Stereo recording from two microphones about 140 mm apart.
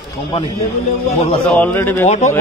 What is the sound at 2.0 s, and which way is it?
Speech, 55° left (ahead or behind).